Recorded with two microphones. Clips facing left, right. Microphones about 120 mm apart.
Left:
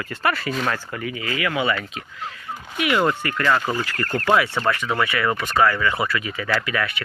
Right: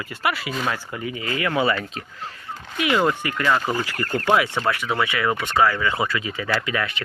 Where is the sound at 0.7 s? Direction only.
15° right (ahead or behind); by 2.3 s 35° right (ahead or behind).